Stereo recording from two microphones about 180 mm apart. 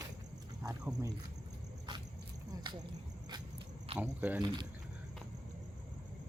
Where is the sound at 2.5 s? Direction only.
25° right (ahead or behind).